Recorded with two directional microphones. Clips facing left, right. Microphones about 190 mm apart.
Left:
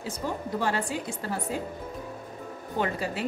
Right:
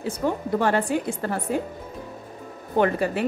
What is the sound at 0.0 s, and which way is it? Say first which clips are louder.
A woman's voice: right 7 dB; 60° right (ahead or behind).